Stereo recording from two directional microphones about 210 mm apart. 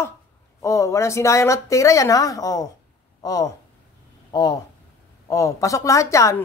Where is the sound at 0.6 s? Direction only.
15° left (ahead or behind).